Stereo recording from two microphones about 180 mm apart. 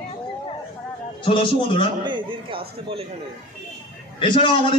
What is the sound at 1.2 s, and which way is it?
Speech, 30° left (ahead or behind).